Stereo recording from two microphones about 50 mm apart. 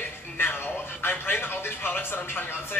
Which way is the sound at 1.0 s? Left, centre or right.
Left.